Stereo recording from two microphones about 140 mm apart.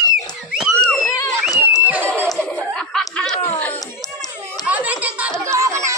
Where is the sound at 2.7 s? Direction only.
5° left (ahead or behind).